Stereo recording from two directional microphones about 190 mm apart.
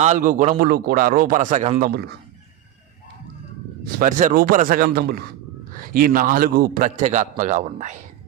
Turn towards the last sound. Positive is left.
turn(degrees=-40)  # may be behind; listen again after turning